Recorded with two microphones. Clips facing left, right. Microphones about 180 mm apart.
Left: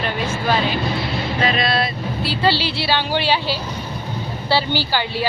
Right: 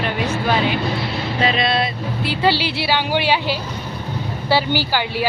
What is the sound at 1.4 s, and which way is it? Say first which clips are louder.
A woman's voice: right 2 dB; 20° right (ahead or behind).